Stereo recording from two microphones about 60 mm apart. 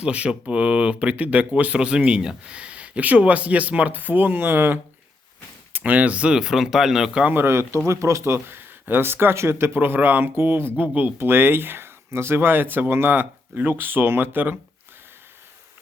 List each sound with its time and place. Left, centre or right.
0.0 s speech: centre; by 4.8 s right
5.7 s speech: right
6.4 s speech: centre
7.3 s speech: right
7.5 s speech: right
7.9 s speech: right
10.8 s speech: right